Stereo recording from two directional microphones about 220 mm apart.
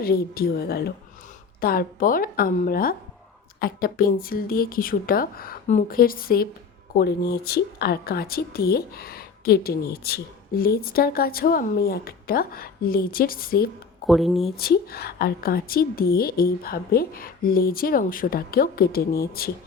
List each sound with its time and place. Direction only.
0.0 s a woman's voice: 45° left (ahead or behind)
14.1 s speech: centre (ahead or behind)
14.5 s a woman's voice: 45° left (ahead or behind)